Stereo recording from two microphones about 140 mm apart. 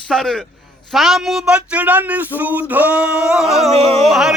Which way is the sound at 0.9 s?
Centre (ahead or behind).